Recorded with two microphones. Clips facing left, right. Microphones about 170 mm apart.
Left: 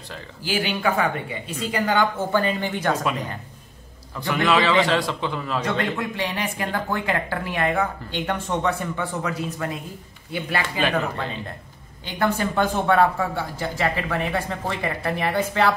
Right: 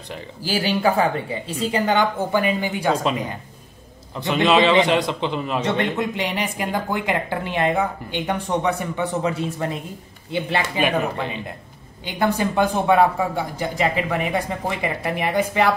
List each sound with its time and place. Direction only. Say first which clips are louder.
0.4 s a woman's voice: right 3 dB; 35° right (ahead or behind); by 3.0 s 15° right (ahead or behind)
4.1 s a man's voice: right 3 dB; 20° right (ahead or behind)